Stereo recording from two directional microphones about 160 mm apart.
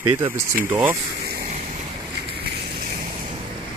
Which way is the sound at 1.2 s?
85° right.